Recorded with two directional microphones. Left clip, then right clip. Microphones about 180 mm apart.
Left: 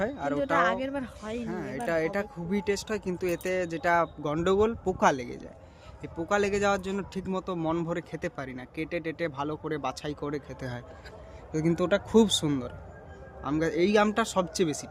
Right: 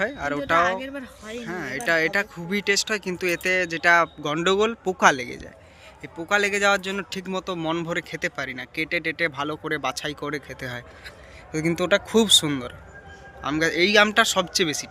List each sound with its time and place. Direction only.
0.6 s speech: 45° left (ahead or behind)
1.5 s speech: 5° left (ahead or behind)